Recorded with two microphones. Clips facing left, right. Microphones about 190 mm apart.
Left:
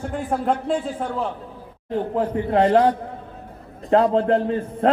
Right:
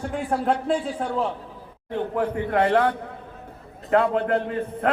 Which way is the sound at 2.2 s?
25° left (ahead or behind).